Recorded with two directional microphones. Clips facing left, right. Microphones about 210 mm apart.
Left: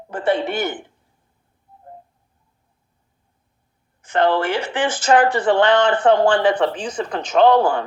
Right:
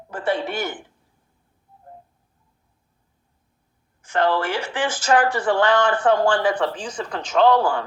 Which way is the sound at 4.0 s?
20° left (ahead or behind).